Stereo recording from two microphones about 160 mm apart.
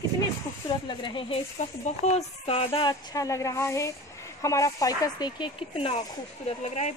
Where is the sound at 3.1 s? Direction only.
20° left (ahead or behind).